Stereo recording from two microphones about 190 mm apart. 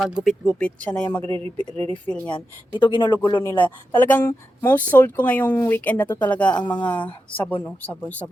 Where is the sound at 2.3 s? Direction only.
25° left (ahead or behind).